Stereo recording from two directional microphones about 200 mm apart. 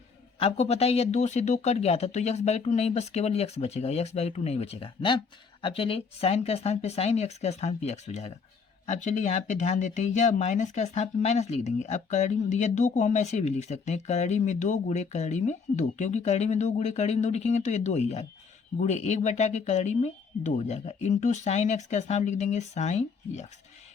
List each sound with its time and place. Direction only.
0.3 s speech: 30° left (ahead or behind)